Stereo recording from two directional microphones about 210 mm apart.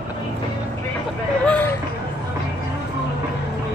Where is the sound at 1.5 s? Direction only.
10° left (ahead or behind).